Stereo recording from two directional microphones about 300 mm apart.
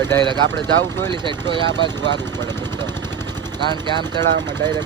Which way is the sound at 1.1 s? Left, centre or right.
Centre.